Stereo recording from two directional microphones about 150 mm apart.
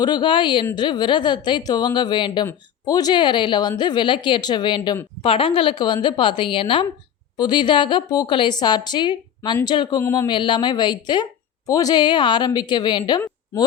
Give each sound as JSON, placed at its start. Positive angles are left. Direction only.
{"t": 0.0, "sound": "a woman's voice", "side_deg": 30}
{"t": 10.3, "sound": "a woman's voice", "side_deg": 30}